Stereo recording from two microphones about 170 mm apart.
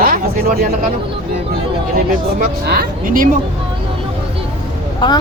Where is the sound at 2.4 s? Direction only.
65° right (ahead or behind).